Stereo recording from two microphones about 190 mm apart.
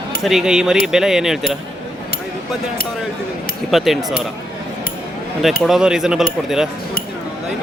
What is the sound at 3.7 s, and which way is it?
Speech, centre (ahead or behind).